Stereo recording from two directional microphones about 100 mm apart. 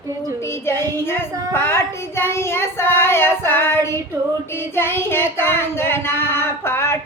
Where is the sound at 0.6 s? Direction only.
25° left (ahead or behind).